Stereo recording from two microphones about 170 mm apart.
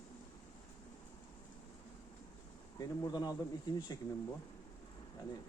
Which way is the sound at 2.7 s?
25° left (ahead or behind).